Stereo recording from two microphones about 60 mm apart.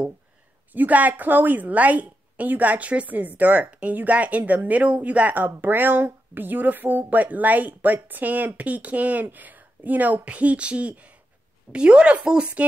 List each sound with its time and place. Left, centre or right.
0.7 s speech: right